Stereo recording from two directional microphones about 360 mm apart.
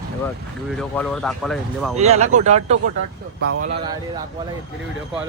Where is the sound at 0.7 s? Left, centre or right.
Centre.